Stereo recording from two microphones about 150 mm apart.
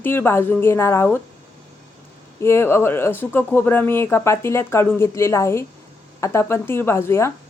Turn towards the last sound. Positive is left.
turn(degrees=15)  # may be behind; listen again after turning